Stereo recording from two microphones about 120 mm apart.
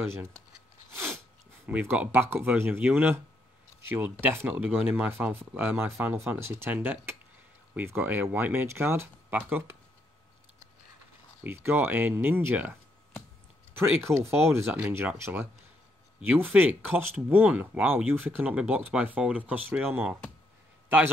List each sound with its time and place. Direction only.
1.7 s speech: 15° right (ahead or behind)
11.4 s speech: 20° right (ahead or behind)
13.7 s speech: 20° right (ahead or behind)
14.7 s speech: 10° right (ahead or behind)
15.0 s speech: 20° right (ahead or behind)